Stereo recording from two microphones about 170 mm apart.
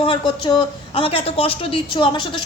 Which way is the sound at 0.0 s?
30° left (ahead or behind).